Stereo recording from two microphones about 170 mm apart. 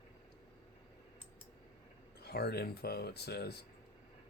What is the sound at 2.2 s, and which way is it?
Speech, 70° left (ahead or behind).